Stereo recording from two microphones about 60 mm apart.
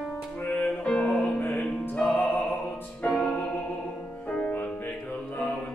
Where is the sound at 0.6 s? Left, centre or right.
Centre.